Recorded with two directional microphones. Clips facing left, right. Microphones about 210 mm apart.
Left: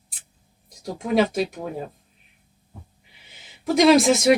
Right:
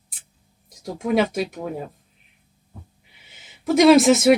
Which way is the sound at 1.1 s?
Centre (ahead or behind).